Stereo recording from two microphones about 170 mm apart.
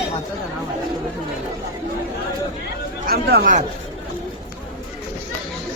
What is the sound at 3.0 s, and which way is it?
Speech, 65° right (ahead or behind).